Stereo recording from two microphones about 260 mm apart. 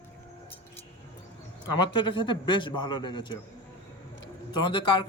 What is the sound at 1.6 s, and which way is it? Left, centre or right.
Speech, centre.